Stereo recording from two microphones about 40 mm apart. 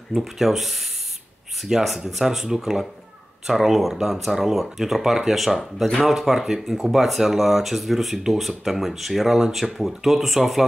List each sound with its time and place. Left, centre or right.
0.1 s speech: centre